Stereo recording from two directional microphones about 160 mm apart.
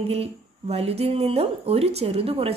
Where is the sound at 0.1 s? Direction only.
40° right (ahead or behind).